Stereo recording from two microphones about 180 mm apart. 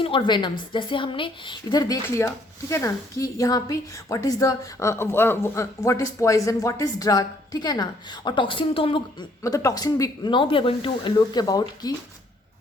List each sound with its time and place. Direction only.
0.0 s a woman's voice: 30° left (ahead or behind)
9.4 s a woman's voice: 20° left (ahead or behind)